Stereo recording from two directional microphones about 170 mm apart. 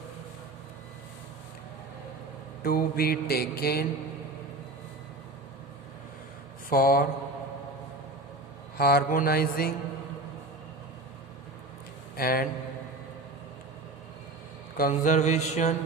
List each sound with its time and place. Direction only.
2.6 s mantra: 60° left (ahead or behind)
6.7 s mantra: 55° left (ahead or behind)
8.8 s mantra: 65° left (ahead or behind)
12.1 s a man's voice: 60° left (ahead or behind)
14.8 s mantra: 50° left (ahead or behind)